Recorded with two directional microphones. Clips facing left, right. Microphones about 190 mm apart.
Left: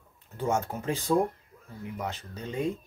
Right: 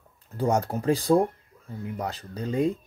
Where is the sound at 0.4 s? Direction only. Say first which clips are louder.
Right 4 dB; 35° right (ahead or behind).